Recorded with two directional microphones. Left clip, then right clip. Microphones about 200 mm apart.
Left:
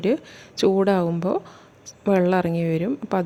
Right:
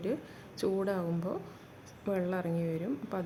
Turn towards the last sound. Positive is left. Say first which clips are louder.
# left 12 dB
turn(degrees=40)  # may be behind; listen again after turning